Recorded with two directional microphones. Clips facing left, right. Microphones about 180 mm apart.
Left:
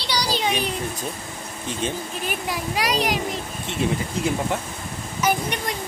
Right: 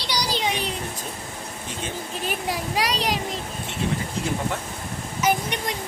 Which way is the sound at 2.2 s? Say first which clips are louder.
Right 1 dB; 30° right (ahead or behind).